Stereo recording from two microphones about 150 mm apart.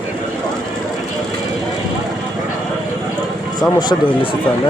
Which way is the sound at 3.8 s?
30° left (ahead or behind).